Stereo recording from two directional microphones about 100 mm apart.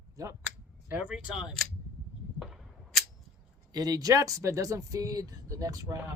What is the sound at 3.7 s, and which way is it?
Speech, 40° right (ahead or behind).